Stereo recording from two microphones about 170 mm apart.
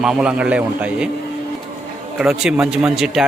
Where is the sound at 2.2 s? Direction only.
5° right (ahead or behind).